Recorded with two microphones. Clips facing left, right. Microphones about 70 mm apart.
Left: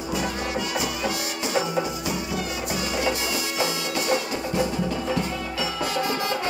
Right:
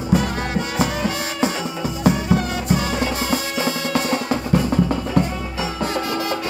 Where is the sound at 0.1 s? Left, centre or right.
Right.